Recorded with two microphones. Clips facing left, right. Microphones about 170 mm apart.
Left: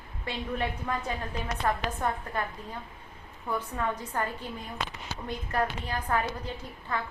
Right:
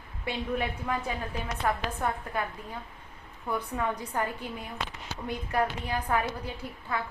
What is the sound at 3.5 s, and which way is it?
A woman's voice, 10° right (ahead or behind).